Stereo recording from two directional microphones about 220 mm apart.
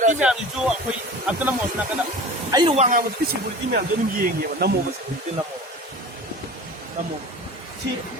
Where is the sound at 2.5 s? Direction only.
20° right (ahead or behind).